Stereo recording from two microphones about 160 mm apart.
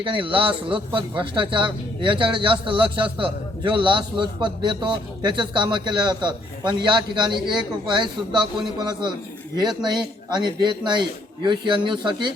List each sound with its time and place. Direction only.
0.0 s speech: 30° right (ahead or behind)